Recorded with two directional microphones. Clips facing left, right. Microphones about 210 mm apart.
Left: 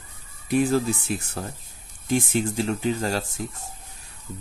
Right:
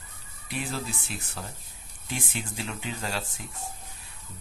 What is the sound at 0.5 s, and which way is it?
Speech, 45° left (ahead or behind).